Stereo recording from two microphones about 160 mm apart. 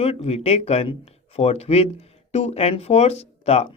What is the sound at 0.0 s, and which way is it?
Speech, 40° left (ahead or behind).